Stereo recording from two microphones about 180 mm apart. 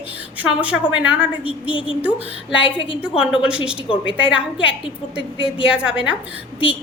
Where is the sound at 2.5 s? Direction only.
5° right (ahead or behind).